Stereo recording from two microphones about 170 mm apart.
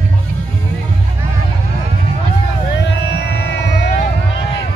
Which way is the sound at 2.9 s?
90° left.